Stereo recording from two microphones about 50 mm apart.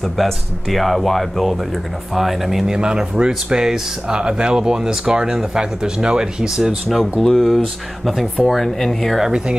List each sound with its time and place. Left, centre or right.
0.2 s speech: centre
2.7 s speech: centre
6.9 s speech: centre